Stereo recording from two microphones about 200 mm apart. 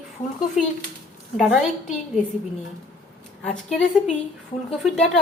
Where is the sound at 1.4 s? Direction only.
Centre (ahead or behind).